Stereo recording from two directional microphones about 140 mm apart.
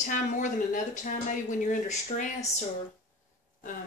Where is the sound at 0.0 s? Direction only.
70° left (ahead or behind).